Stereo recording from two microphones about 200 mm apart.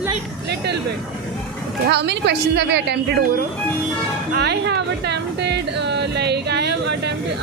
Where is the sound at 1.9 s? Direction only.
55° right (ahead or behind).